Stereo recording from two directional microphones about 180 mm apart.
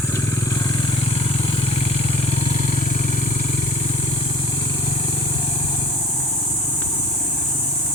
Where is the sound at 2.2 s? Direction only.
35° left (ahead or behind).